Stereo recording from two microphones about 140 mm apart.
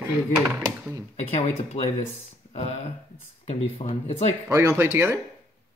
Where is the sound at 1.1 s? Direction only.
55° left (ahead or behind).